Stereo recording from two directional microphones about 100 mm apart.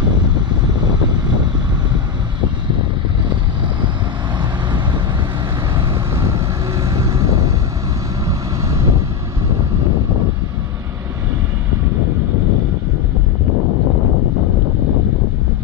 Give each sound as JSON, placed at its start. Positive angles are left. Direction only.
{"t": 4.4, "sound": "vehicle", "side_deg": -50}
{"t": 5.8, "sound": "vehicle", "side_deg": -25}
{"t": 6.8, "sound": "vehicle", "side_deg": -35}